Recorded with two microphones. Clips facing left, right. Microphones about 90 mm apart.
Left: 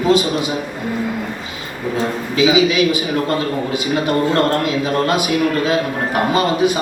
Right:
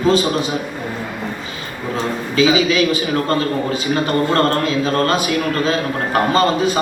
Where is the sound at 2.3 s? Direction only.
15° left (ahead or behind).